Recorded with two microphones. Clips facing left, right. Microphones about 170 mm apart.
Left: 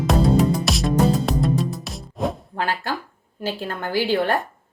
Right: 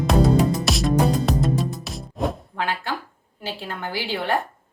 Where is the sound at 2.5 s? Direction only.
40° left (ahead or behind).